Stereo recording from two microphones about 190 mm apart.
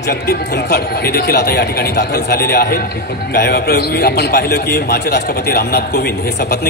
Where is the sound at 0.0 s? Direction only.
55° left (ahead or behind).